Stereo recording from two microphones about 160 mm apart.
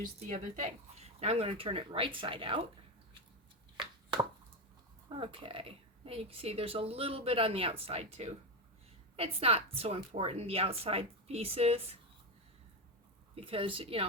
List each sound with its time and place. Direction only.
0.0 s speech: 50° right (ahead or behind); by 2.6 s 35° right (ahead or behind)
3.8 s chopping: 30° right (ahead or behind)
5.0 s speech: 35° right (ahead or behind)
13.3 s speech: 35° right (ahead or behind)